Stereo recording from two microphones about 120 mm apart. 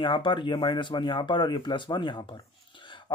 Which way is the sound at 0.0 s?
40° left (ahead or behind).